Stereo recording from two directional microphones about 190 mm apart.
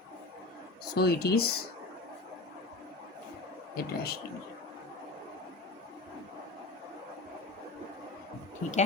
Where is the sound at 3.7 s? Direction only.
55° left (ahead or behind).